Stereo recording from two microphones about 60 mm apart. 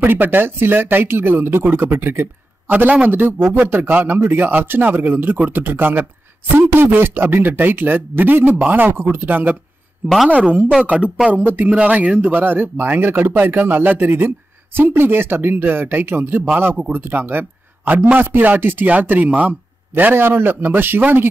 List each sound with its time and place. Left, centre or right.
0.0 s speech: right
10.0 s speech: centre
11.4 s speech: right
11.7 s speech: centre; by 21.3 s right